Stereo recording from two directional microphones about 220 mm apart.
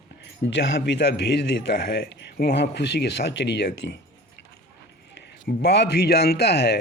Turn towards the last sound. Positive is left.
turn(degrees=50)  # may be behind; listen again after turning